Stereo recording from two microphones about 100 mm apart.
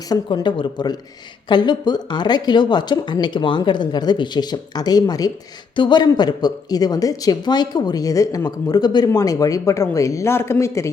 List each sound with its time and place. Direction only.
0.1 s speech: 40° left (ahead or behind)
5.7 s speech: 50° left (ahead or behind); by 10.8 s 30° left (ahead or behind)